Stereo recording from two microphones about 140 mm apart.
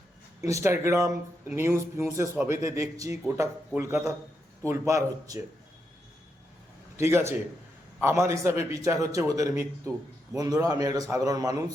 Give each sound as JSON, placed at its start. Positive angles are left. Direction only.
{"t": 0.4, "sound": "a man's voice", "side_deg": -20}
{"t": 6.9, "sound": "a man's voice", "side_deg": -20}